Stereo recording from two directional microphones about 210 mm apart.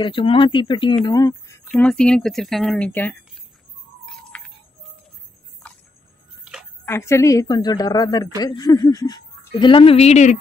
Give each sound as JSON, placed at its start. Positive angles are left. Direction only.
{"t": 0.0, "sound": "a woman's voice", "side_deg": 25}
{"t": 1.6, "sound": "speech", "side_deg": 5}
{"t": 4.0, "sound": "music", "side_deg": 5}
{"t": 6.9, "sound": "a woman's voice", "side_deg": 15}